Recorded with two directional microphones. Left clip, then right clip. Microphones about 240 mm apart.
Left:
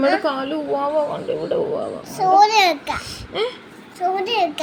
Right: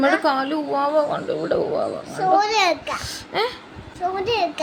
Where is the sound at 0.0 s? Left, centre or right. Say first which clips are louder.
Even; centre.